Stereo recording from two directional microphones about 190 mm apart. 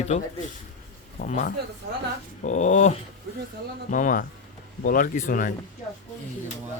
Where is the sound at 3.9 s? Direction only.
45° left (ahead or behind).